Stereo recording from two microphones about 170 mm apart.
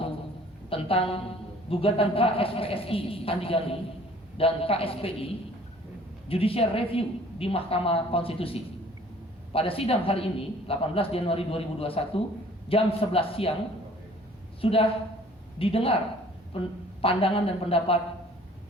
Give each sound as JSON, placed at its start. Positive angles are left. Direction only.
{"t": 0.7, "sound": "a woman's voice", "side_deg": 35}
{"t": 14.6, "sound": "a woman's voice", "side_deg": 35}